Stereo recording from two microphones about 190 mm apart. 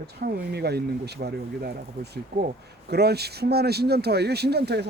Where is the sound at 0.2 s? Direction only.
55° right (ahead or behind).